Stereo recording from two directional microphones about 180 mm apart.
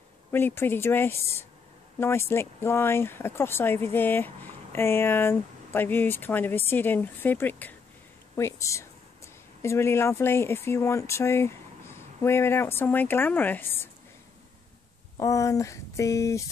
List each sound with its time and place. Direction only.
0.3 s speech: 10° left (ahead or behind)
15.1 s speech: 20° left (ahead or behind)